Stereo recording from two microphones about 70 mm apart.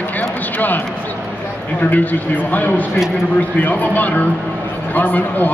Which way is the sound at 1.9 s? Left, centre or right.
Left.